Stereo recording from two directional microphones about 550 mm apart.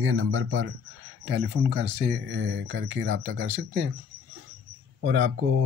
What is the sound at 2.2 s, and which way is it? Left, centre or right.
Speech, right.